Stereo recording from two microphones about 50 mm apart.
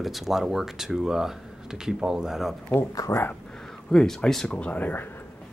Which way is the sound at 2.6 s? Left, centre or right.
Left.